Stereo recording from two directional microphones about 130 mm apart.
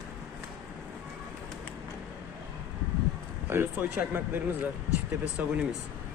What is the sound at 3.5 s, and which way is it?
Speech, 15° right (ahead or behind).